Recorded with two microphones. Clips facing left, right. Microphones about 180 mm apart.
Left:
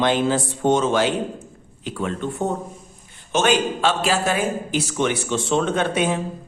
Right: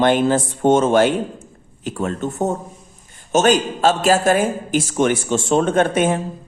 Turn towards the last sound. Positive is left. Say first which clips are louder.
# right 4 dB
turn(degrees=-50)  # may be behind; listen again after turning